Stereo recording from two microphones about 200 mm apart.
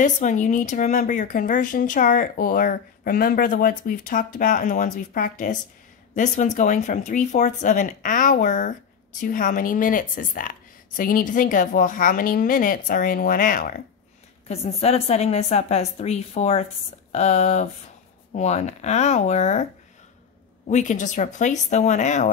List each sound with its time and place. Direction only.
0.0 s a woman's voice: 40° left (ahead or behind)
14.5 s speech: 30° left (ahead or behind)